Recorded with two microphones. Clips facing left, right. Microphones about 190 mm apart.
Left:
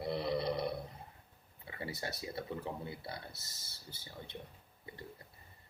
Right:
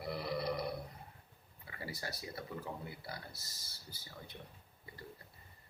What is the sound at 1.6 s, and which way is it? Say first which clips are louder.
Speech: left 3 dB; 25° left (ahead or behind).